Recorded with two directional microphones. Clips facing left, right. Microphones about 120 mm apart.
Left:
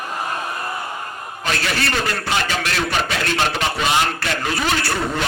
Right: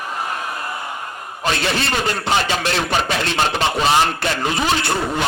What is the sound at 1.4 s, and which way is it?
Speech, 25° right (ahead or behind).